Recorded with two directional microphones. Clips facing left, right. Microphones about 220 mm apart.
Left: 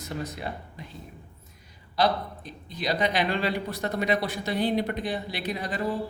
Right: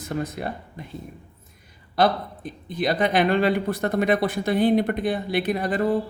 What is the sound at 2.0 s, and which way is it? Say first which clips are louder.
A man's voice: right 4 dB; 50° right (ahead or behind).